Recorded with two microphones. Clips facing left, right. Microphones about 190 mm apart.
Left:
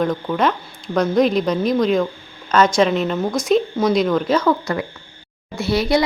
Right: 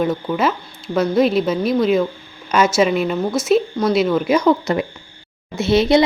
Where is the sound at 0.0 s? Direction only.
5° right (ahead or behind).